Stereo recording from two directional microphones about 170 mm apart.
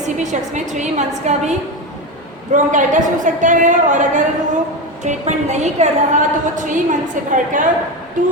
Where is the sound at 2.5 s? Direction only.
50° right (ahead or behind).